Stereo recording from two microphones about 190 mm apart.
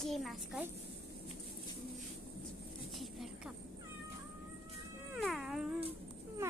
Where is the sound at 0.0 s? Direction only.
Centre (ahead or behind).